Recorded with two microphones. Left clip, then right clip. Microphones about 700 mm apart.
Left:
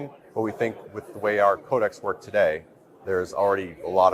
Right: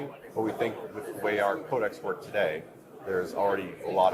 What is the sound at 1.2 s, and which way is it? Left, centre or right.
A man's voice, left.